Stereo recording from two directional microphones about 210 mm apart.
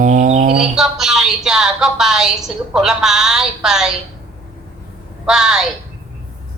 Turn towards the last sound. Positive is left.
turn(degrees=0)  # may be behind; listen again after turning